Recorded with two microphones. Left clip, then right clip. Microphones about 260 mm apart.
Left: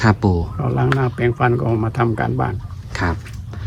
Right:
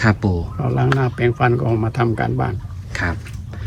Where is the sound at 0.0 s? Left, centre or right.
Centre.